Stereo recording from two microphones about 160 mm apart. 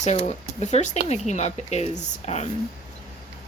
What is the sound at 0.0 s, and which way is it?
Speech, 45° left (ahead or behind).